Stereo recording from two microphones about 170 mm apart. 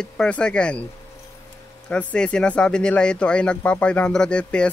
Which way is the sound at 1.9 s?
5° left (ahead or behind).